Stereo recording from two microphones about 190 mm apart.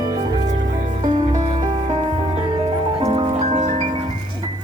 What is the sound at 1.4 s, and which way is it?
Music, 35° right (ahead or behind).